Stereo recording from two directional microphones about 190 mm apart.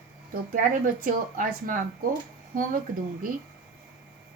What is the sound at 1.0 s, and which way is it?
Speech, 45° right (ahead or behind).